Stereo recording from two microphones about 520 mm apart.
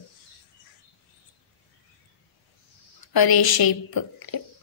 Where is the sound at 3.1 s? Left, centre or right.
Left.